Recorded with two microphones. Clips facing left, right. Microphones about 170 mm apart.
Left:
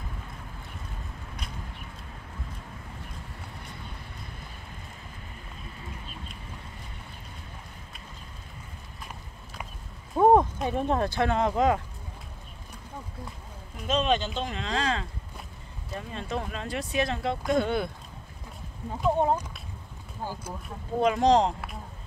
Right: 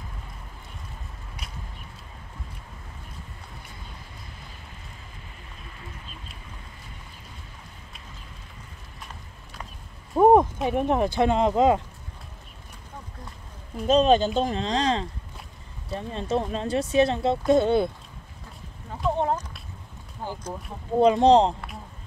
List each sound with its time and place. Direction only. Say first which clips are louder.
10.1 s speech: right 3 dB; 10° right (ahead or behind)
13.8 s speech: right 7 dB; 40° right (ahead or behind)
19.0 s speech: left 1 dB; 10° left (ahead or behind)
21.0 s speech: right 5 dB; 30° right (ahead or behind)